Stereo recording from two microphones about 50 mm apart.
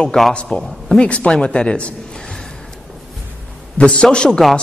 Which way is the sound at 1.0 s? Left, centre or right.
Left.